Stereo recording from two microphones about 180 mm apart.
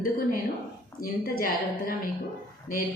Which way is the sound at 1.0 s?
55° left (ahead or behind).